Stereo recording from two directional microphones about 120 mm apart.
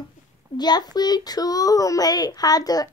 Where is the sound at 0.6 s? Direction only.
35° left (ahead or behind).